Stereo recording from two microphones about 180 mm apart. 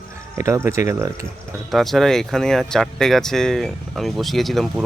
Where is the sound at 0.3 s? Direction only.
15° right (ahead or behind).